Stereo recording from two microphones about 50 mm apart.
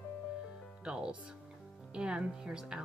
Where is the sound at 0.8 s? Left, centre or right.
Centre.